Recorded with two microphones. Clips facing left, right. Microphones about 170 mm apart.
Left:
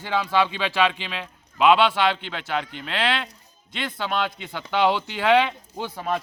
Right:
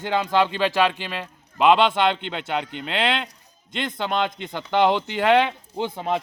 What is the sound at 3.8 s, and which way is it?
Speech, 20° right (ahead or behind).